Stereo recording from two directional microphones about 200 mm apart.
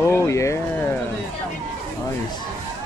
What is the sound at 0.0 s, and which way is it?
Speech, 15° left (ahead or behind).